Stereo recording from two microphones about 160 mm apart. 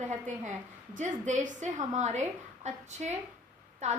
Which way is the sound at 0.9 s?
50° right (ahead or behind).